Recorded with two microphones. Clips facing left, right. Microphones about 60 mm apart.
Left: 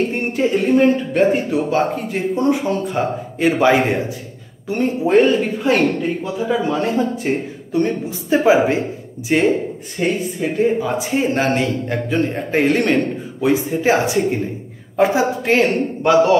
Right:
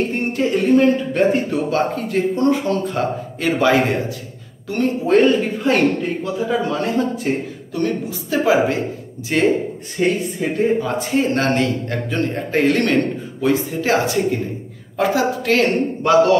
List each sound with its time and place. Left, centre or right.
0.1 s speech: centre
0.9 s a man's voice: centre
5.2 s a man's voice: centre
7.7 s speech: left
9.5 s a man's voice: centre